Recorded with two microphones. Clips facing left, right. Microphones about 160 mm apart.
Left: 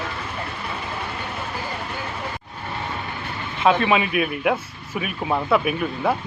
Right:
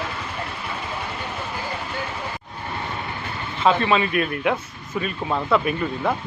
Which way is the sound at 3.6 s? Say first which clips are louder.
Left 1 dB; 5° left (ahead or behind).